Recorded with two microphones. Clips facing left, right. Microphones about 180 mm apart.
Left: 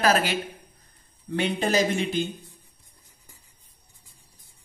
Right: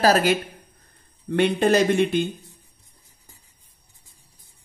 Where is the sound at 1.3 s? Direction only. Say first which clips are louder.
Right 6 dB; 60° right (ahead or behind).